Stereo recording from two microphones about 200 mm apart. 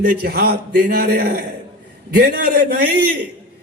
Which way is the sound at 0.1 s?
50° right (ahead or behind).